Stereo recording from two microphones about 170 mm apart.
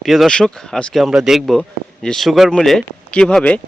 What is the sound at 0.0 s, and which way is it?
Speech, centre (ahead or behind).